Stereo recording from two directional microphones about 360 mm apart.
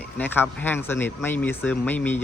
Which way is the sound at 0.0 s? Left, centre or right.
Centre.